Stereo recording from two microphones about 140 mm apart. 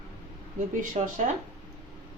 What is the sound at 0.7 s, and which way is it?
Speech, 65° right (ahead or behind).